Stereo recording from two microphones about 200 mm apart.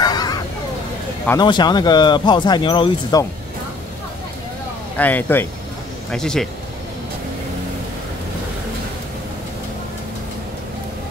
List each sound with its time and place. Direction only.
0.0 s vehicle: 20° left (ahead or behind)
1.4 s speech: 20° left (ahead or behind)
4.9 s speech: 10° left (ahead or behind)